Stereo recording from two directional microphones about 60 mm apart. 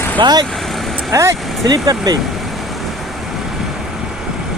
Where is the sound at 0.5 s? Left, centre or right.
Centre.